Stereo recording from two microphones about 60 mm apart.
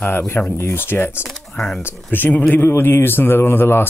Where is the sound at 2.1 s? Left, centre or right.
Left.